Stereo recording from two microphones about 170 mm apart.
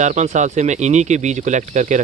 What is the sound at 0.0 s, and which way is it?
Speech, 45° right (ahead or behind).